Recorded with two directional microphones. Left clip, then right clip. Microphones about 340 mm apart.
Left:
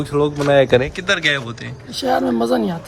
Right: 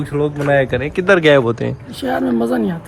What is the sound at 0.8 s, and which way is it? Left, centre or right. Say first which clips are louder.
Speech: right 6 dB; centre.